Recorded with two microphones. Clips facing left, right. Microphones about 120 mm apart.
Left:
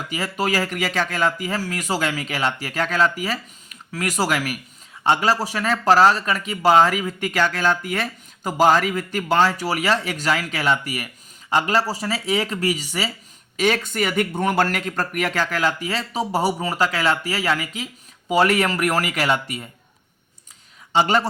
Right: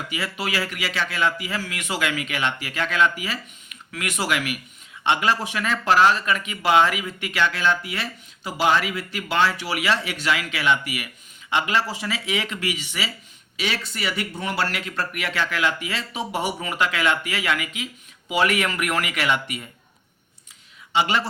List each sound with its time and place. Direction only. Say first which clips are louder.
0.1 s speech: left 6 dB; 40° left (ahead or behind)
20.9 s speech: left 4 dB; 40° left (ahead or behind)